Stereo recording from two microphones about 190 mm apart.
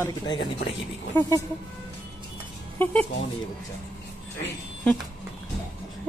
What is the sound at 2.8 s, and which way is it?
Speech, 10° left (ahead or behind).